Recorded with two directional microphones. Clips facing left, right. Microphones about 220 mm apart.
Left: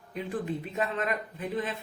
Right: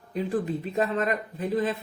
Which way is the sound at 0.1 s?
35° right (ahead or behind).